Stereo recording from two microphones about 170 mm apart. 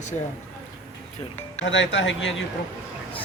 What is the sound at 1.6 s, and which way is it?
Speech, 90° left.